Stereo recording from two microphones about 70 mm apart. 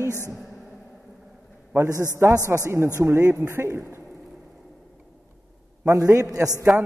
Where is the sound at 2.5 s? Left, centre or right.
Right.